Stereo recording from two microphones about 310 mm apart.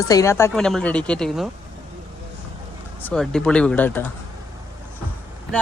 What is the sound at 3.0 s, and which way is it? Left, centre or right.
Speech, centre.